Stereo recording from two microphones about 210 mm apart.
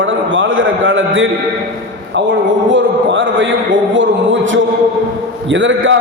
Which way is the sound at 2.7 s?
60° right (ahead or behind).